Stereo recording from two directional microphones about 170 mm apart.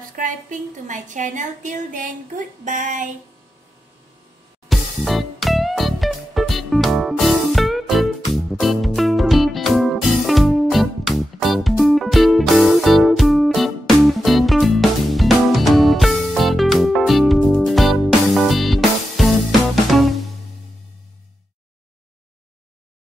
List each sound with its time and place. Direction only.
0.1 s a woman's voice: 50° right (ahead or behind)
4.6 s music: centre (ahead or behind)